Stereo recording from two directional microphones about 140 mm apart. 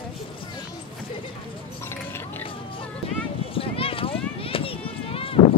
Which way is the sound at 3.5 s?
40° left (ahead or behind).